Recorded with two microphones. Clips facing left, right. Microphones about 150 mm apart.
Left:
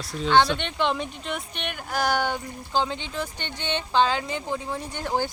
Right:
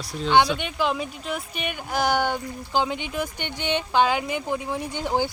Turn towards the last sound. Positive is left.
turn(degrees=-15)  # may be behind; listen again after turning